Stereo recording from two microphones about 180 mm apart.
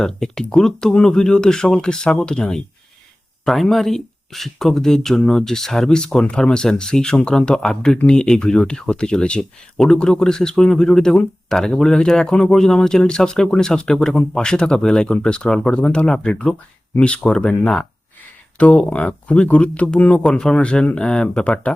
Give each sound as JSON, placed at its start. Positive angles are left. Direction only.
{"t": 0.0, "sound": "speech", "side_deg": 5}